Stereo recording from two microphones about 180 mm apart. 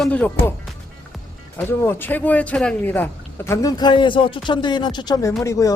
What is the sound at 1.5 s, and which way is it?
Speech, 10° left (ahead or behind).